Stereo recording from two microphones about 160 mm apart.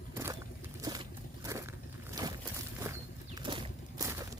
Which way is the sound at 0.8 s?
25° right (ahead or behind).